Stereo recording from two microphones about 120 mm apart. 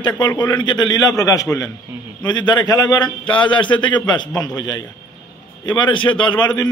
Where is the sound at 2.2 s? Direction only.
40° left (ahead or behind).